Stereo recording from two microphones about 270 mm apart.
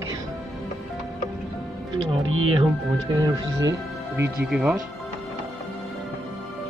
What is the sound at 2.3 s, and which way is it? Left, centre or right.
Speech, right.